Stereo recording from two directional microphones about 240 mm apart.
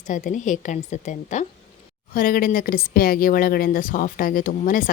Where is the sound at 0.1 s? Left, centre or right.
Left.